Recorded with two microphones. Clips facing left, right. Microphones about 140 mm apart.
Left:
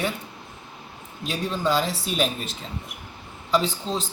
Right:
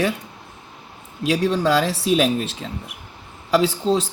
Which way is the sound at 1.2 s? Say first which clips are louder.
Right 7 dB; 85° right.